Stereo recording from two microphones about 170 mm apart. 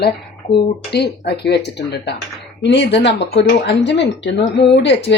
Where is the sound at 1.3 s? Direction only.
80° left.